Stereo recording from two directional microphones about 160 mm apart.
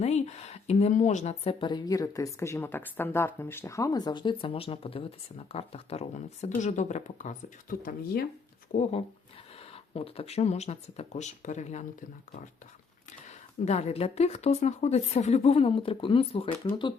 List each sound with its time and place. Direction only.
0.0 s a woman's voice: 45° left (ahead or behind); by 8.2 s 65° left (ahead or behind)
9.6 s speech: 40° left (ahead or behind)
13.2 s a woman's voice: 45° left (ahead or behind)